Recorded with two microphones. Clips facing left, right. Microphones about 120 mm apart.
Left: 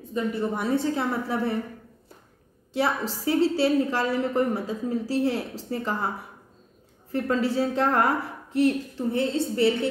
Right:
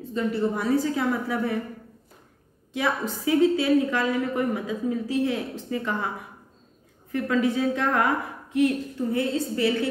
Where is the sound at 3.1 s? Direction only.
35° left (ahead or behind).